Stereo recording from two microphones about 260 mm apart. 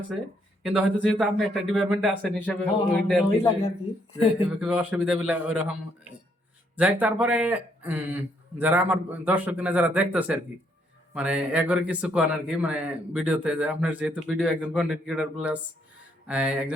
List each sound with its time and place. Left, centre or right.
1.0 s speech: centre
6.7 s speech: centre